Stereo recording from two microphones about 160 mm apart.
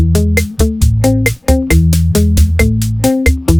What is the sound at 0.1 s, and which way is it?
Music, centre (ahead or behind).